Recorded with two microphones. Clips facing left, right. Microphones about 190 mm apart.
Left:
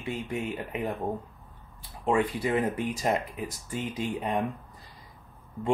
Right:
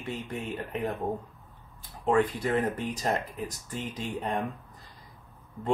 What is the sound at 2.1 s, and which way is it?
Speech, 10° left (ahead or behind).